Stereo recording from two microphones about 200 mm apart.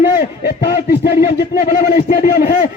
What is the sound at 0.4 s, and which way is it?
Speech, 55° left (ahead or behind).